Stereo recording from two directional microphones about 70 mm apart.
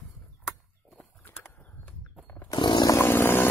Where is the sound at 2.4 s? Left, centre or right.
Left.